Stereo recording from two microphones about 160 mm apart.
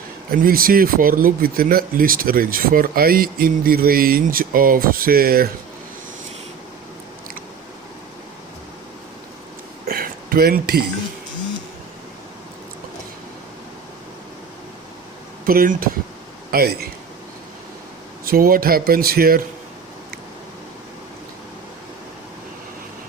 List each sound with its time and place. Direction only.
0.3 s speech: 65° right (ahead or behind)
9.8 s a sound: 65° right (ahead or behind)
15.4 s speech: 65° right (ahead or behind)
18.3 s speech: 65° right (ahead or behind)